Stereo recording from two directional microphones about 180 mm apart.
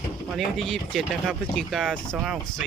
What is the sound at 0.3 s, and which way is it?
Speech, centre (ahead or behind).